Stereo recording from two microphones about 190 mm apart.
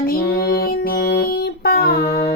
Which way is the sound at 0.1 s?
50° left (ahead or behind).